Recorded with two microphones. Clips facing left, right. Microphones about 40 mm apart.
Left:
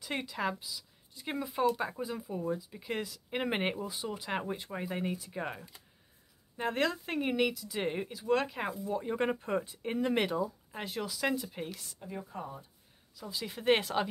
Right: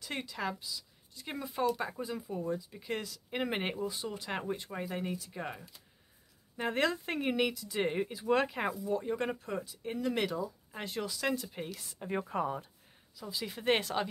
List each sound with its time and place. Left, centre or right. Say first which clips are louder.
0.0 s speech: left 3 dB; centre
6.5 s speech: even; centre
8.8 s speech: left 4 dB; centre
10.3 s speech: left 3 dB; centre
12.1 s speech: right 8 dB; right
13.2 s speech: left 1 dB; centre